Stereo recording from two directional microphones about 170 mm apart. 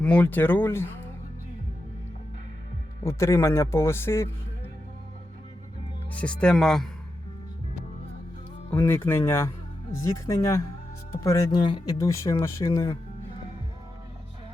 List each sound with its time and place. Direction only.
0.0 s a man's voice: 10° left (ahead or behind)
3.0 s a man's voice: 15° left (ahead or behind)
6.1 s speech: 5° left (ahead or behind)
8.7 s a man's voice: 10° left (ahead or behind)